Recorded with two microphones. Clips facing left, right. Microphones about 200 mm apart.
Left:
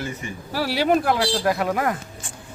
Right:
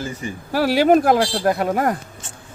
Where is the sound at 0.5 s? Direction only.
50° right (ahead or behind).